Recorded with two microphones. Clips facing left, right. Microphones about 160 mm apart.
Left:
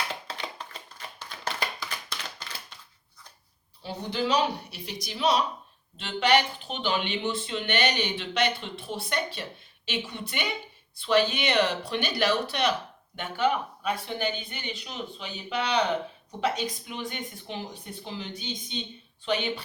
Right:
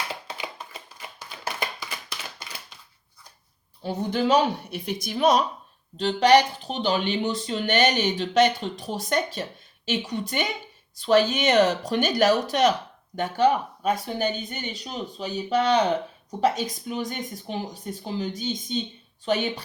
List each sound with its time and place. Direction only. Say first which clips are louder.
0.3 s tap: right 1 dB; 10° right (ahead or behind)
3.8 s speech: right 5 dB; 50° right (ahead or behind)